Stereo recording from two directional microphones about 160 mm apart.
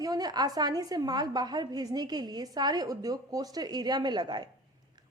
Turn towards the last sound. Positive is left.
turn(degrees=-25)  # may be behind; listen again after turning